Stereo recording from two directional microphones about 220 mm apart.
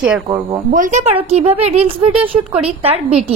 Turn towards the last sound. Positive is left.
turn(degrees=-25)  # may be behind; listen again after turning